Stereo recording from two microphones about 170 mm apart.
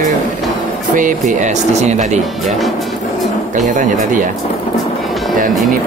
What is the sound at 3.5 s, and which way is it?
Speech, 50° right (ahead or behind).